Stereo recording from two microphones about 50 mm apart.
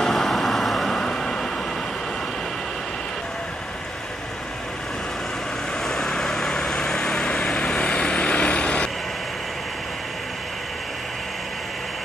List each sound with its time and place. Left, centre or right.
0.0 s vehicle: centre
5.9 s vehicle: centre